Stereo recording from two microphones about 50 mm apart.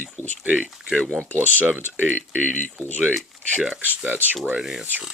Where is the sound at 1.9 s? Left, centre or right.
Right.